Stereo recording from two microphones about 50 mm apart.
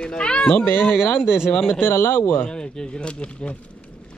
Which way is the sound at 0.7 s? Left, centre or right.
Left.